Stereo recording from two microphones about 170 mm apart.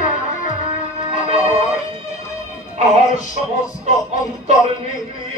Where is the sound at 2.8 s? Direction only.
40° right (ahead or behind).